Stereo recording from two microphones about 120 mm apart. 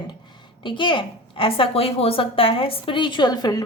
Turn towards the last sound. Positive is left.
turn(degrees=35)  # may be behind; listen again after turning